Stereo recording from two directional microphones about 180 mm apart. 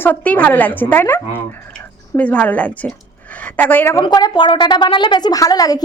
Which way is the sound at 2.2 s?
10° left (ahead or behind).